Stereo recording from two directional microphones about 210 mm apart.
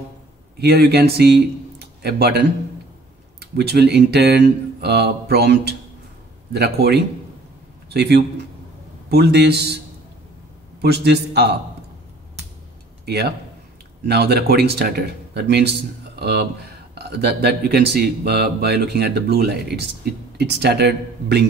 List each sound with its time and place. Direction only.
0.6 s a man's voice: 50° right (ahead or behind)
10.8 s speech: 50° right (ahead or behind)
13.0 s speech: 50° right (ahead or behind)